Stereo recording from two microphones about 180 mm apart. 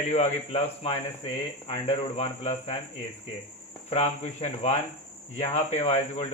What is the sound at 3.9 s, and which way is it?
Speech, 35° left (ahead or behind).